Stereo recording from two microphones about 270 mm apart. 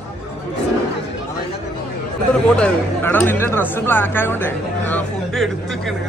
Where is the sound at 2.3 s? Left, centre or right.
Centre.